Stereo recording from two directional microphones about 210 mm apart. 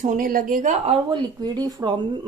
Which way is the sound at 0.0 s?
40° right (ahead or behind).